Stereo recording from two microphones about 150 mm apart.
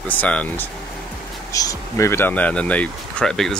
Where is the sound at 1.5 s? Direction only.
20° left (ahead or behind).